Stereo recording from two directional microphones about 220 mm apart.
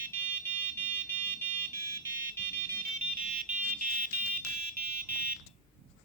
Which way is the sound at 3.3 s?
35° right (ahead or behind).